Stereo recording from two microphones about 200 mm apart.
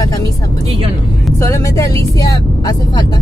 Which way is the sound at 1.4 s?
15° left (ahead or behind).